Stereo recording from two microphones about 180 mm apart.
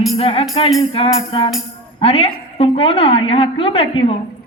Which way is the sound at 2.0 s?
35° left (ahead or behind).